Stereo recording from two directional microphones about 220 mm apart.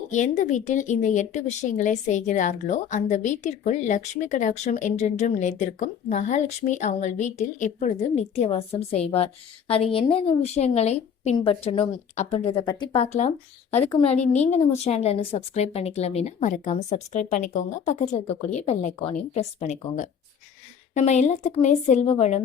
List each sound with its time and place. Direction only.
0.1 s a woman's voice: 35° left (ahead or behind)